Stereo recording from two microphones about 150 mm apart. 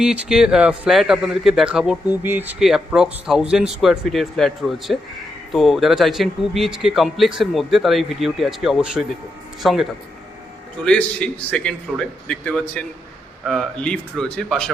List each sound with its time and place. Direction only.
0.0 s a man's voice: 5° right (ahead or behind)
10.8 s a man's voice: 5° left (ahead or behind)